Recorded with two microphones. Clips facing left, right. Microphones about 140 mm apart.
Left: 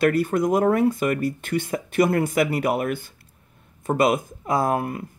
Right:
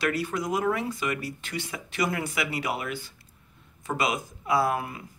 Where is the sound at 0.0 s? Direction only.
50° left (ahead or behind).